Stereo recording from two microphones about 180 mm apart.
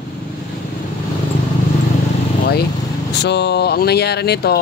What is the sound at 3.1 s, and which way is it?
Speech, 70° left (ahead or behind).